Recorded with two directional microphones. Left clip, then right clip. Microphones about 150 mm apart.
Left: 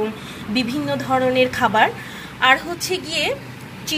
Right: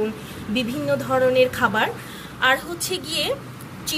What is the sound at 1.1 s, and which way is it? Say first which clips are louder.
A woman's voice: left 1 dB; 15° left (ahead or behind).